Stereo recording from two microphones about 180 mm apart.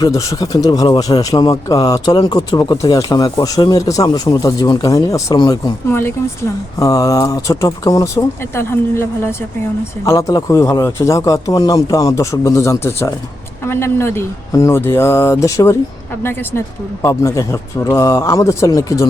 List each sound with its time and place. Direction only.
0.0 s speech: 20° left (ahead or behind)